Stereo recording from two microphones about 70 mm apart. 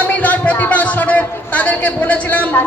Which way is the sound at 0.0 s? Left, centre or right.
Left.